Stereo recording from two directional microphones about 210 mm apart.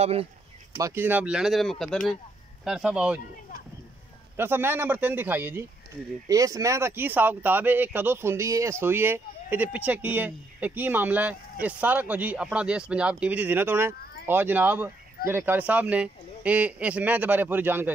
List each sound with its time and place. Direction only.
0.0 s speech: 30° right (ahead or behind)
0.7 s speech: 15° right (ahead or behind)
4.4 s speech: 10° right (ahead or behind)